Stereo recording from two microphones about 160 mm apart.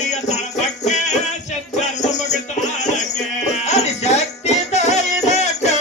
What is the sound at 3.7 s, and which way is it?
Music, 45° left (ahead or behind).